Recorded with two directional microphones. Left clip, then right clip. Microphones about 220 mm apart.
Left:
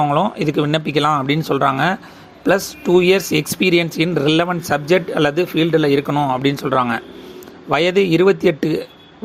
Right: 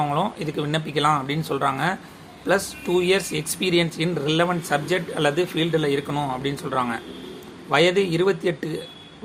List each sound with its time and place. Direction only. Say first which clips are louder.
0.0 s speech: left 7 dB; 25° left (ahead or behind)